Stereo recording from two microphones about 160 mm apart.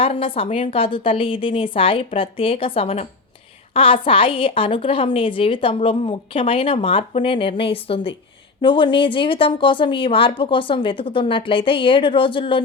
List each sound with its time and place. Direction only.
0.0 s a woman's voice: 35° left (ahead or behind)